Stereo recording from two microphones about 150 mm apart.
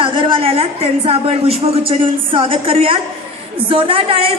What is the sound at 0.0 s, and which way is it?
A woman's voice, 35° right (ahead or behind).